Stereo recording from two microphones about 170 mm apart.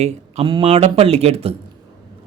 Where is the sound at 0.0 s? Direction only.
35° right (ahead or behind).